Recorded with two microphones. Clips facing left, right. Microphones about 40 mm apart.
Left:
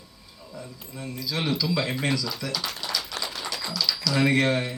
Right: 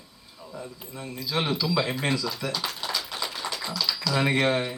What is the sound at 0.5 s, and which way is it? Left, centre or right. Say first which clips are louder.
Speech: right 1 dB; centre.